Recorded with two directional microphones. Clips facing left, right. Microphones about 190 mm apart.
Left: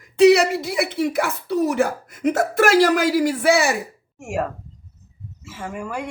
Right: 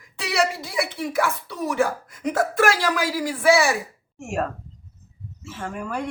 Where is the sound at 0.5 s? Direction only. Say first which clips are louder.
Left 5 dB; 20° left (ahead or behind).